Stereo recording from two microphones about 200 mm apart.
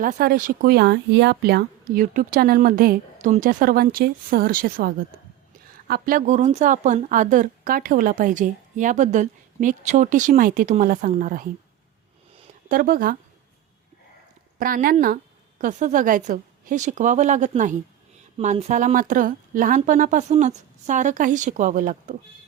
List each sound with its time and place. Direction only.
0.0 s a woman's voice: 45° right (ahead or behind)
12.6 s speech: 45° right (ahead or behind)
14.6 s a woman's voice: 45° right (ahead or behind)